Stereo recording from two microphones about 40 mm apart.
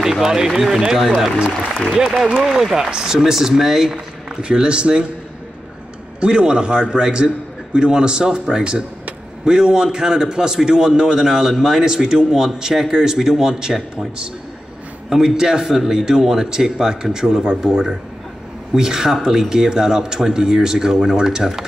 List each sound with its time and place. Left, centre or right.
0.0 s a man's voice: centre
2.4 s a man's voice: centre
3.9 s a man's voice: right
6.1 s a man's voice: right
15.0 s a man's voice: centre